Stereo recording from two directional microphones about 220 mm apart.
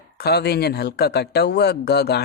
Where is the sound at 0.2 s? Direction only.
45° left (ahead or behind).